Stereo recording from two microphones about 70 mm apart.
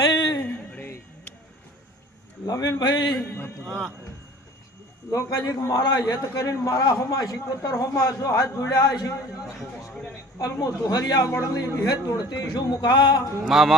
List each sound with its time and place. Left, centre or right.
0.4 s a sound: left
2.5 s speech: left
3.2 s a sound: left
3.7 s music: centre
5.1 s a man's voice: left
9.9 s a man's voice: centre
10.3 s a man's voice: left
13.4 s music: centre